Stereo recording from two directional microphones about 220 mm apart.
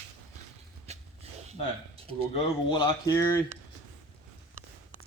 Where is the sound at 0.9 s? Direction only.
30° right (ahead or behind).